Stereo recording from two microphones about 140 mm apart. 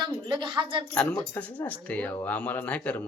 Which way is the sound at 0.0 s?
35° right (ahead or behind).